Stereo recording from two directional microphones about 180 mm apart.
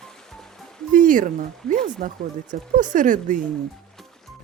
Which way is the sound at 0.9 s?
50° right (ahead or behind).